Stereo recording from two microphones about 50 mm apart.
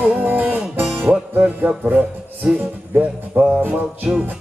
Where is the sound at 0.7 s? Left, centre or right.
Right.